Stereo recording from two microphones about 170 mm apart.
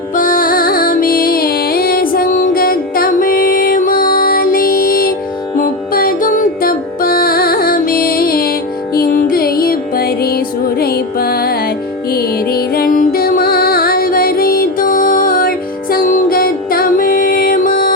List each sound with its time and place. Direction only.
0.2 s music: 55° left (ahead or behind)